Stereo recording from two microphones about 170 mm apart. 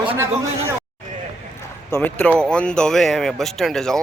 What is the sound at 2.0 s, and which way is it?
Speech, 10° left (ahead or behind).